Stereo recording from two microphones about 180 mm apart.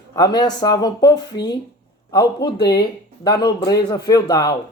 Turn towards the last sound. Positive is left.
turn(degrees=20)  # may be behind; listen again after turning